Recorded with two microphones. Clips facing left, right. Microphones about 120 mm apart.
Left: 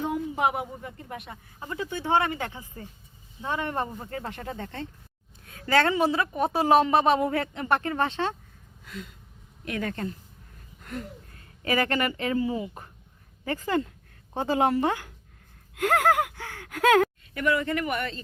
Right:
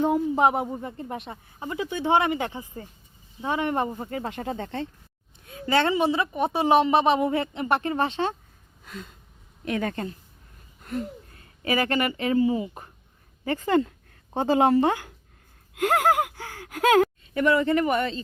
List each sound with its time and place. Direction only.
0.0 s a woman's voice: 35° right (ahead or behind)
1.5 s speech: 15° right (ahead or behind)
5.5 s speech: 15° right (ahead or behind)
6.0 s a woman's voice: centre (ahead or behind)
7.3 s speech: 20° right (ahead or behind)
8.9 s a woman's voice: 30° right (ahead or behind)
11.6 s speech: 15° right (ahead or behind)
15.7 s a sound: 15° right (ahead or behind)
16.2 s gasp: 35° right (ahead or behind)
16.9 s speech: 30° right (ahead or behind)